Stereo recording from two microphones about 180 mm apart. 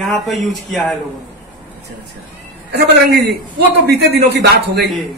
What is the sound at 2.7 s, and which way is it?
A man's voice, 65° right (ahead or behind).